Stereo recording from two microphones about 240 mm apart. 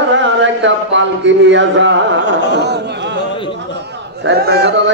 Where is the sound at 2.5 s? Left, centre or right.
Right.